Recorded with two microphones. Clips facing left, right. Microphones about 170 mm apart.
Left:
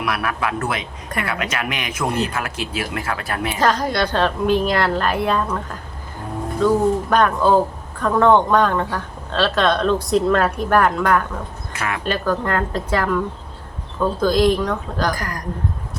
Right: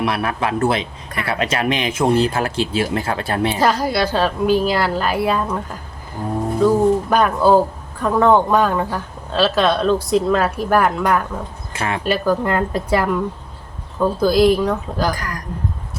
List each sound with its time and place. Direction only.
0.0 s speech: 30° right (ahead or behind)
3.6 s a woman's voice: 10° right (ahead or behind)
6.6 s speech: 5° right (ahead or behind)
11.7 s speech: 30° right (ahead or behind)
12.0 s speech: 10° right (ahead or behind)